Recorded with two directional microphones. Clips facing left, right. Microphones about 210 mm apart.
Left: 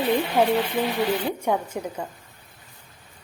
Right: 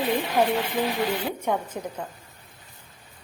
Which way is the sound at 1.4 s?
10° left (ahead or behind).